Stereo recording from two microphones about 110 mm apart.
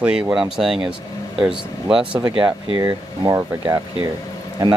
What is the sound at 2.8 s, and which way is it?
Speech, 35° right (ahead or behind).